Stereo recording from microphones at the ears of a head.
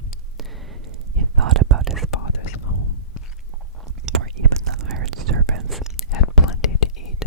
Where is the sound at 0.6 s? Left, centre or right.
Right.